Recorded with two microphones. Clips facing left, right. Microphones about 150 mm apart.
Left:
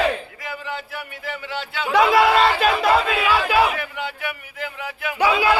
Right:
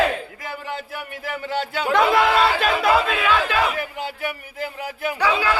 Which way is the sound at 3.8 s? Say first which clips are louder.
Right 1 dB; 40° right (ahead or behind).